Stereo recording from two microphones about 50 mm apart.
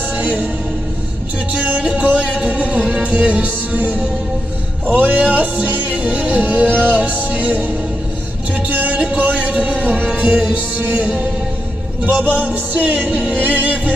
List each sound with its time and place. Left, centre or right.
0.2 s music: right
1.5 s music: right
12.2 s music: right